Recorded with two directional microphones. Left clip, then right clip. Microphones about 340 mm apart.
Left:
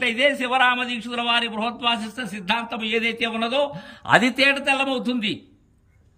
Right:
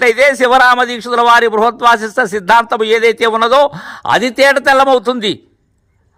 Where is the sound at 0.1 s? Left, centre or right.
Centre.